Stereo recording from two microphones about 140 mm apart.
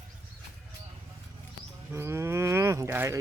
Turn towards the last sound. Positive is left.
turn(degrees=-20)  # may be behind; listen again after turning